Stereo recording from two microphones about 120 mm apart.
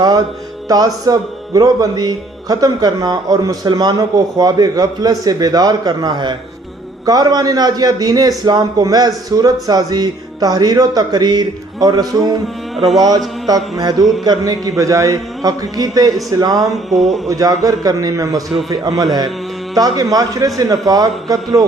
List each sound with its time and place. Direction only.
0.7 s speech: 30° right (ahead or behind)
12.7 s music: centre (ahead or behind)
13.7 s speech: 35° right (ahead or behind)
16.7 s a sound: centre (ahead or behind)
17.3 s a man's voice: 30° right (ahead or behind)
18.3 s a sound: centre (ahead or behind)
19.1 s speech: 35° right (ahead or behind)